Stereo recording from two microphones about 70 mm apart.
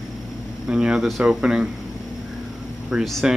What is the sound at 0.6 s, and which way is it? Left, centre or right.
Speech, centre.